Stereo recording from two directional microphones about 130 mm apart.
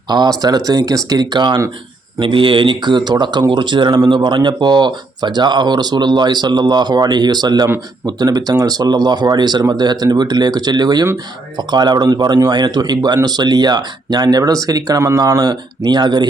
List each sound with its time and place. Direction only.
0.1 s speech: 30° right (ahead or behind)